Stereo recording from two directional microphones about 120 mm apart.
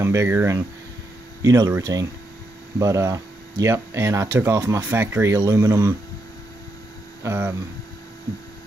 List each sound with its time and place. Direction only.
0.0 s speech: 20° right (ahead or behind)
7.2 s speech: 20° right (ahead or behind)